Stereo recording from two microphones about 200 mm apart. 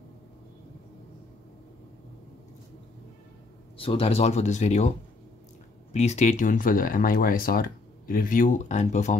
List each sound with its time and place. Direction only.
3.7 s speech: 30° left (ahead or behind)
5.9 s speech: 35° left (ahead or behind)